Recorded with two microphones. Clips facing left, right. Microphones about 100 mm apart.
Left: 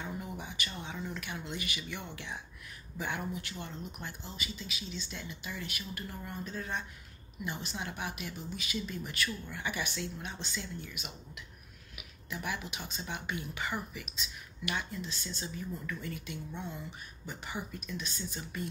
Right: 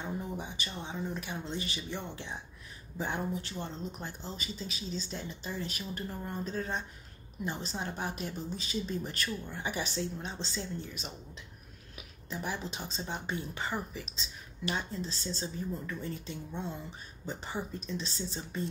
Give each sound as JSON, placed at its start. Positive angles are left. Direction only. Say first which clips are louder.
{"t": 0.0, "sound": "a sound", "louder": "right 3 dB", "side_deg": -25}
{"t": 0.8, "sound": "speech", "louder": "right 6 dB", "side_deg": -20}
{"t": 12.3, "sound": "speech", "louder": "right 1 dB", "side_deg": -30}